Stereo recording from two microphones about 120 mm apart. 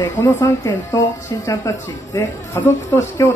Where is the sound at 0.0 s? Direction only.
15° left (ahead or behind).